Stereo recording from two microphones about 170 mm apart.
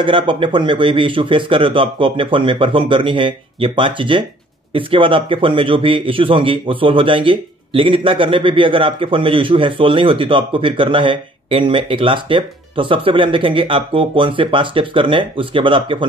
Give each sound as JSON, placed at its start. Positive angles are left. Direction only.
{"t": 0.0, "sound": "a man's voice", "side_deg": -30}